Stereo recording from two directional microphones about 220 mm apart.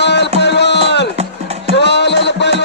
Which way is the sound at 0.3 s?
50° left (ahead or behind).